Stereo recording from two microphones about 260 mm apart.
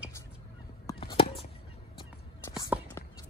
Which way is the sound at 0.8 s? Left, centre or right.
Centre.